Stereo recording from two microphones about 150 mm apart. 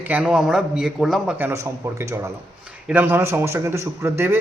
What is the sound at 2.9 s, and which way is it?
A man's voice, 10° right (ahead or behind).